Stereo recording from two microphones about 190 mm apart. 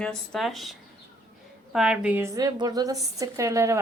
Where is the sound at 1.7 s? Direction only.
5° right (ahead or behind).